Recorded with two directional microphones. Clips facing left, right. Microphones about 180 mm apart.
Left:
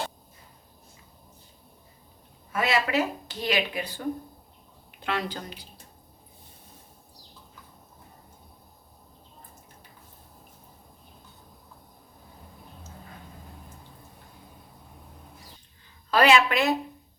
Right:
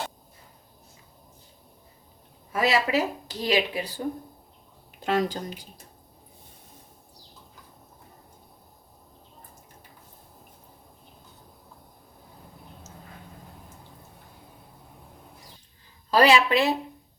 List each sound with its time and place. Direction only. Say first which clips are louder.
2.5 s speech: right 2 dB; 35° right (ahead or behind)
16.1 s speech: right 1 dB; 35° right (ahead or behind)